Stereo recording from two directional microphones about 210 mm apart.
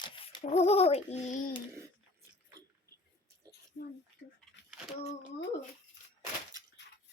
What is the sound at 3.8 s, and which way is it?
Speech, 50° left (ahead or behind).